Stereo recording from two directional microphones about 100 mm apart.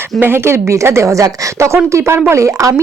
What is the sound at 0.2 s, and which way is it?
Speech, 25° right (ahead or behind).